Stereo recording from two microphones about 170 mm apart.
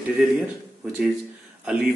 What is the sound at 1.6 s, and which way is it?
Speech, 5° right (ahead or behind).